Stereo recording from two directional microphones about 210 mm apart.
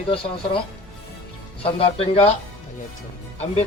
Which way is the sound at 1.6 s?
25° left (ahead or behind).